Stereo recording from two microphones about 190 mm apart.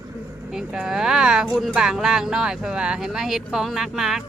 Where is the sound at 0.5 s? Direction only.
5° right (ahead or behind).